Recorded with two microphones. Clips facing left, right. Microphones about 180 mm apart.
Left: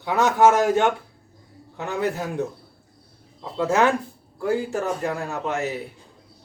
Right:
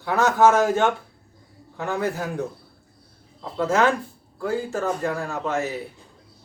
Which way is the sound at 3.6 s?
15° left (ahead or behind).